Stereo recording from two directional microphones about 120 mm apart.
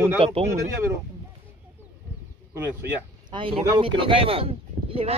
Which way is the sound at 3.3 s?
45° right (ahead or behind).